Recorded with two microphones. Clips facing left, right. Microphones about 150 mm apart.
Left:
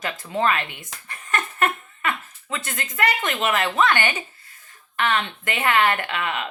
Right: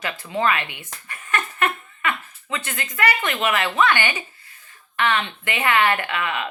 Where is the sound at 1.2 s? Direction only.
40° left (ahead or behind).